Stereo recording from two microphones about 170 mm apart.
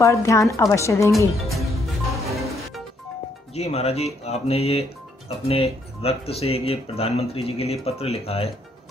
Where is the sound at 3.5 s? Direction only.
40° left (ahead or behind).